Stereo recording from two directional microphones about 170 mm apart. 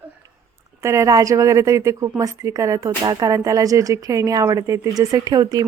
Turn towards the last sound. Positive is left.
turn(degrees=-20)  # may be behind; listen again after turning